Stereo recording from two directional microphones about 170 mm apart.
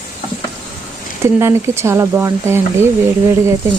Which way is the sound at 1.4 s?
15° right (ahead or behind).